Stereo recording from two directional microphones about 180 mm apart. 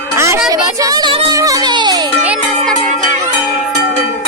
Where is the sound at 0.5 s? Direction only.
20° right (ahead or behind).